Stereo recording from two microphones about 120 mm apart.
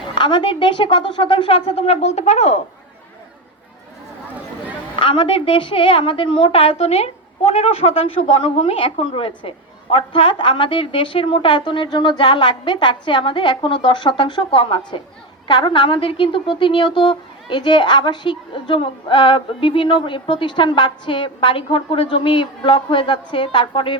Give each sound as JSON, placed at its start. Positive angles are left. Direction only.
{"t": 0.1, "sound": "a woman's voice", "side_deg": 40}
{"t": 4.9, "sound": "a woman's voice", "side_deg": 45}